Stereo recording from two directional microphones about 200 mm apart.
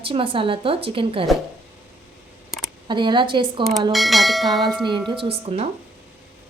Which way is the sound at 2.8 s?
25° right (ahead or behind).